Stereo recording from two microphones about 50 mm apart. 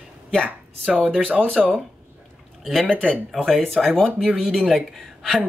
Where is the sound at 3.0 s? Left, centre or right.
Centre.